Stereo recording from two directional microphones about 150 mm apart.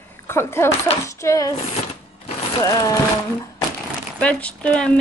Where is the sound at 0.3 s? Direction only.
15° left (ahead or behind).